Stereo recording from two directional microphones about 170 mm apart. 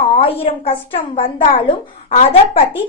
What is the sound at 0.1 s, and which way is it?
Speech, 35° left (ahead or behind).